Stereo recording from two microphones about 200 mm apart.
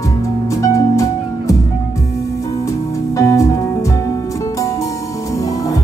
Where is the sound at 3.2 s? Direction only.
15° left (ahead or behind).